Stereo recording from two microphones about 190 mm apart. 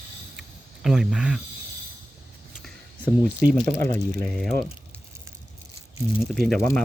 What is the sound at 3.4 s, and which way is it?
Speech, 45° right (ahead or behind).